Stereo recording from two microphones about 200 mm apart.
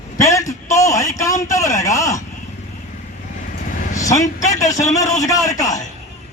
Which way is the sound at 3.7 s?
35° left (ahead or behind).